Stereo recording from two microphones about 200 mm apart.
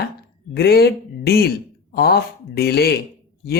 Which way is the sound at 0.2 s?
50° left (ahead or behind).